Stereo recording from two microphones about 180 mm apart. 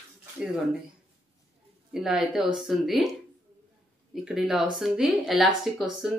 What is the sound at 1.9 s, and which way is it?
Speech, centre (ahead or behind).